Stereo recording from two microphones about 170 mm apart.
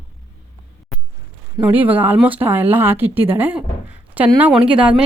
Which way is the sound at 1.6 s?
10° right (ahead or behind).